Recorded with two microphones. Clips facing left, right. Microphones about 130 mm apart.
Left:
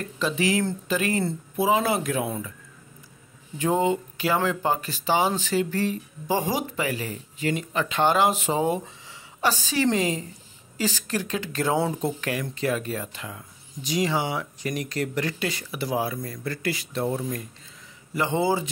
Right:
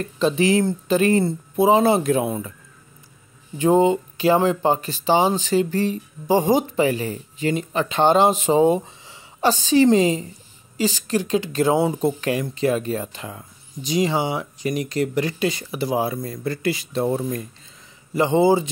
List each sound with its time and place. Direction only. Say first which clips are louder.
0.0 s speech: right 6 dB; 30° right (ahead or behind)
3.5 s speech: right 6 dB; 25° right (ahead or behind)
12.2 s speech: right 6 dB; 25° right (ahead or behind)